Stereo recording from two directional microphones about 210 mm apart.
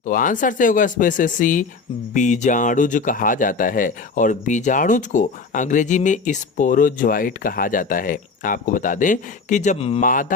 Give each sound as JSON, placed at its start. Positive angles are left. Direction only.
{"t": 0.0, "sound": "speech", "side_deg": 40}